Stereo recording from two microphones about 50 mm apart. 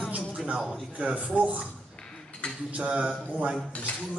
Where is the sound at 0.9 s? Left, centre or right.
Right.